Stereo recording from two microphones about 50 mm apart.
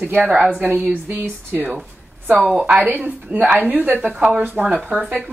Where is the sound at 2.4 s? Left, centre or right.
Centre.